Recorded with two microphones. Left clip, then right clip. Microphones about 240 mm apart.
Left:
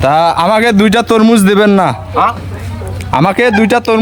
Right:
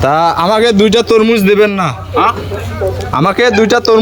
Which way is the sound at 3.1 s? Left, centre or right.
Centre.